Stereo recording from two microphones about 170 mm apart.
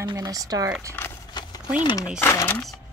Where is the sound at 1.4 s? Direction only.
25° left (ahead or behind).